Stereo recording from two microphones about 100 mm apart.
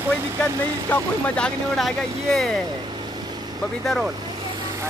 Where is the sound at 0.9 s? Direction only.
15° left (ahead or behind).